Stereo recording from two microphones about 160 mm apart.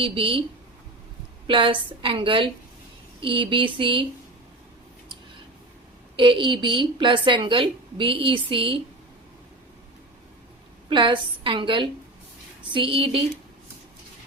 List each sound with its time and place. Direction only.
0.0 s a woman's voice: 35° right (ahead or behind)
1.5 s a woman's voice: 30° right (ahead or behind)
6.1 s a woman's voice: 30° right (ahead or behind)
10.8 s a woman's voice: 30° right (ahead or behind)